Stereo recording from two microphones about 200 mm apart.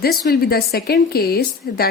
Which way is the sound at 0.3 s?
50° left (ahead or behind).